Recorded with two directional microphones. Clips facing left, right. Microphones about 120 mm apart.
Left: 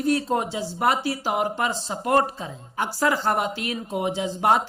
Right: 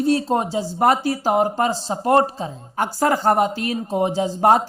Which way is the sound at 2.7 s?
45° right (ahead or behind).